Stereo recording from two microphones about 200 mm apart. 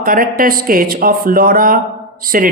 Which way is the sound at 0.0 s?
45° right (ahead or behind).